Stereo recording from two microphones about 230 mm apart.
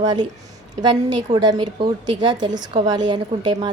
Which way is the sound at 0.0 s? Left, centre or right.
Centre.